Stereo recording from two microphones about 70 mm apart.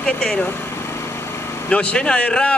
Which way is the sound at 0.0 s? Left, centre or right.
Centre.